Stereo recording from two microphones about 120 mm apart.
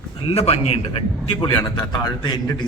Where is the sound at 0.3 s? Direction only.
55° left (ahead or behind).